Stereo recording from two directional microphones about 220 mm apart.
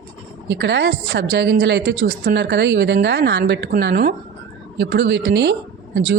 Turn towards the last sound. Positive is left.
turn(degrees=-50)  # may be behind; listen again after turning